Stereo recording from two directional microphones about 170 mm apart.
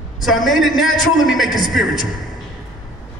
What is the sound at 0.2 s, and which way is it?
A man's voice, centre (ahead or behind).